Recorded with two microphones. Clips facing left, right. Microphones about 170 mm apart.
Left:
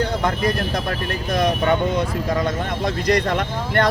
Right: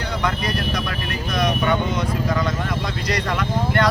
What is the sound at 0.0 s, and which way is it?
Speech, 50° left (ahead or behind).